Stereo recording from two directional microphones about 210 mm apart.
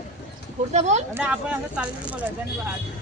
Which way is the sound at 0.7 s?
35° right (ahead or behind).